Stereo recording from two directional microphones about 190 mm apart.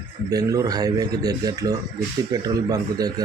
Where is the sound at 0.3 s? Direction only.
20° right (ahead or behind).